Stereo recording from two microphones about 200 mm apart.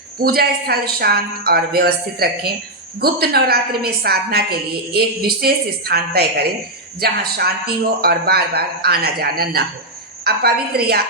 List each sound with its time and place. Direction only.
0.2 s a woman's voice: 50° right (ahead or behind)